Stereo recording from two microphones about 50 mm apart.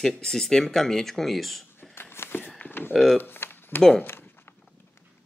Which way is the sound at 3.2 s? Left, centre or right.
Left.